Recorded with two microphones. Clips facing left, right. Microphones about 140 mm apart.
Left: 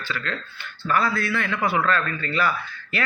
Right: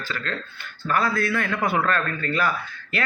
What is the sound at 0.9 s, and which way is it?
A man's voice, 45° right (ahead or behind).